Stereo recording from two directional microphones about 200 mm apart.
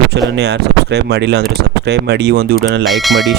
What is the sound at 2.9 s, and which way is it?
Speech, centre (ahead or behind).